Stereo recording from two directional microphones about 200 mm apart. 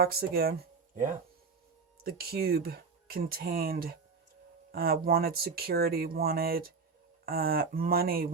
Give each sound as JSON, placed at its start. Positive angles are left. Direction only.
{"t": 0.0, "sound": "speech", "side_deg": -50}
{"t": 2.0, "sound": "speech", "side_deg": -50}